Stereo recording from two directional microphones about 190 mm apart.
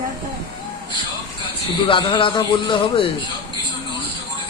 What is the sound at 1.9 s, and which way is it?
A man's voice, 25° left (ahead or behind).